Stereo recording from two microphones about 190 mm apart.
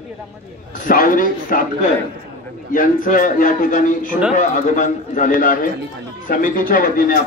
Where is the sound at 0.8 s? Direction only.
45° left (ahead or behind).